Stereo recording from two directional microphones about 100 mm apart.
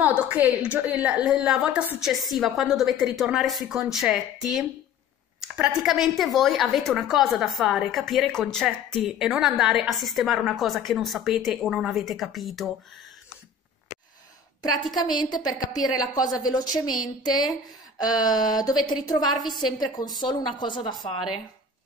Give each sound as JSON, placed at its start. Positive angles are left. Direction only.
{"t": 0.0, "sound": "a woman's voice", "side_deg": -15}
{"t": 2.0, "sound": "a woman's voice", "side_deg": 0}
{"t": 15.0, "sound": "a woman's voice", "side_deg": 45}
{"t": 17.9, "sound": "a woman's voice", "side_deg": 40}